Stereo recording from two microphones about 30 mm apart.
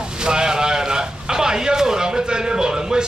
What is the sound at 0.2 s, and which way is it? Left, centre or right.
A man's voice, right.